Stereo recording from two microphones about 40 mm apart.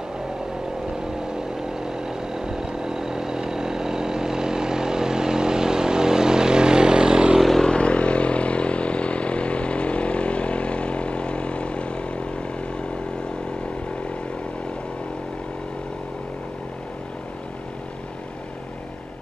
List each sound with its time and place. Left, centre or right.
1.1 s vehicle: centre
7.6 s motorcycle: left